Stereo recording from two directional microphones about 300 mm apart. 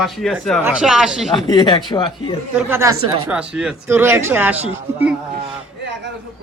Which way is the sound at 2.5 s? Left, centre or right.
Centre.